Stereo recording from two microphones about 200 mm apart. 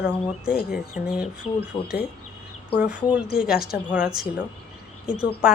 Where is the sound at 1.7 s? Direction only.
15° left (ahead or behind).